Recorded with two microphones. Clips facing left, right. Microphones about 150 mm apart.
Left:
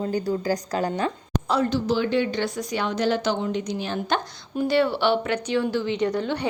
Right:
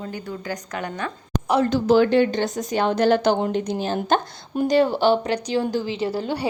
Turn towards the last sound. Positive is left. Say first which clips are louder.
# left 1 dB
turn(degrees=-30)  # may be behind; listen again after turning